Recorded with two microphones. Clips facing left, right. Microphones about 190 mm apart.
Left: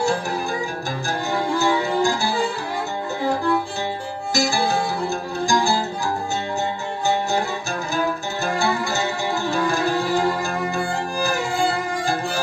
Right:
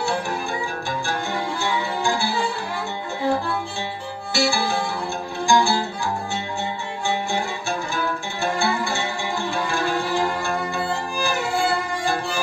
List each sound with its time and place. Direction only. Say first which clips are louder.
1.6 s music: left 7 dB; 40° left (ahead or behind)
4.3 s music: left 1 dB; 40° left (ahead or behind)
7.9 s music: left 3 dB; 40° left (ahead or behind)